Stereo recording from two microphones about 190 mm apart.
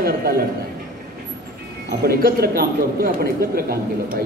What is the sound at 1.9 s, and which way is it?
A man's voice, 50° right (ahead or behind).